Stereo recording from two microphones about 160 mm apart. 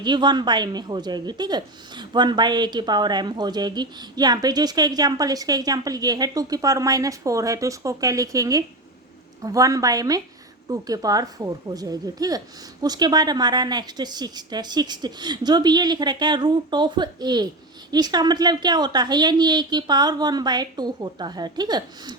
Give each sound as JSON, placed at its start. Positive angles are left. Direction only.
{"t": 0.0, "sound": "a woman's voice", "side_deg": -25}